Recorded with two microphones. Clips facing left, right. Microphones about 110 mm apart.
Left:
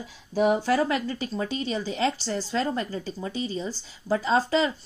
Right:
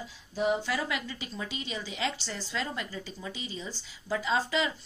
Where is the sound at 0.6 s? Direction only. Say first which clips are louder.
Left 9 dB; 45° left (ahead or behind).